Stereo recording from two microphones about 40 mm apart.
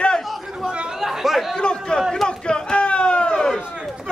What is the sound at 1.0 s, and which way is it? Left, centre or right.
Chatter, centre.